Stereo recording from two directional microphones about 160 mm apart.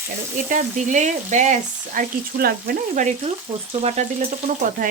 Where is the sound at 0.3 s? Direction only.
55° right (ahead or behind); by 4.0 s 40° right (ahead or behind).